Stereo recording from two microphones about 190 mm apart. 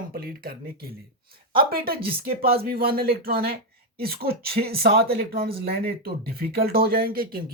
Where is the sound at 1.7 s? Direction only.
50° right (ahead or behind).